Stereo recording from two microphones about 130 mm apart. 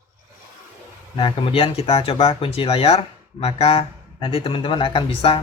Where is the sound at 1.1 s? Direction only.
45° left (ahead or behind).